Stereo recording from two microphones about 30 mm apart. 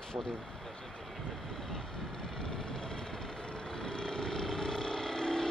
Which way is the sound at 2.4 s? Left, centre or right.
Left.